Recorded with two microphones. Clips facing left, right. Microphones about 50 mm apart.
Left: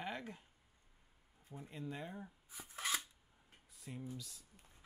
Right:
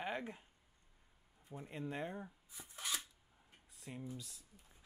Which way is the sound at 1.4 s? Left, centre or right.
Right.